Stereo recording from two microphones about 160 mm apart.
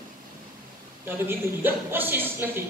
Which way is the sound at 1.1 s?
15° right (ahead or behind).